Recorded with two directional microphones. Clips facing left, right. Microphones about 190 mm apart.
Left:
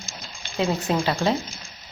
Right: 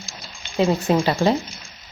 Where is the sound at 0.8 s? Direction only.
15° right (ahead or behind).